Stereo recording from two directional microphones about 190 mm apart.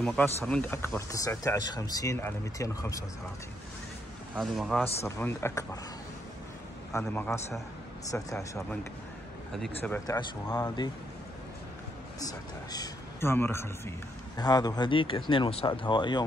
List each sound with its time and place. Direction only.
0.0 s speech: 5° left (ahead or behind)
4.4 s speech: centre (ahead or behind)
5.0 s speech: 15° left (ahead or behind)
6.9 s speech: 10° left (ahead or behind)
9.8 s speech: 10° left (ahead or behind)
12.2 s a man's voice: 20° left (ahead or behind)